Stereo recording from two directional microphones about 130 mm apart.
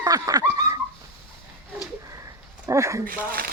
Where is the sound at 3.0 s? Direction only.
90° right.